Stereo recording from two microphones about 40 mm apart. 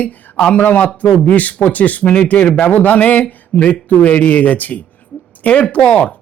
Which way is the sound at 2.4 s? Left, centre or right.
Left.